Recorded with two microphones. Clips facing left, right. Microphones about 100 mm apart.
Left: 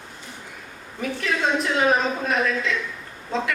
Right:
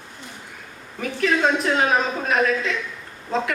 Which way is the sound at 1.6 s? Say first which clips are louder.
Even; 45° right (ahead or behind).